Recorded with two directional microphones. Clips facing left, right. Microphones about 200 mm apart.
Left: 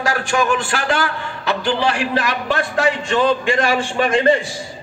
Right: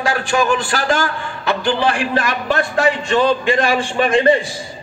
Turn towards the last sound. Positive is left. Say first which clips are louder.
# right 2 dB
turn(degrees=-25)  # may be behind; listen again after turning